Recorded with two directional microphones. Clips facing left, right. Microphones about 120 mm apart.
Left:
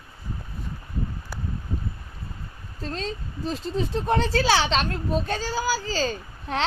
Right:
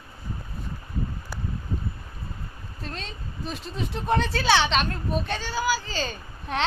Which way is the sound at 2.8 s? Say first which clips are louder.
Left 7 dB; 35° left (ahead or behind).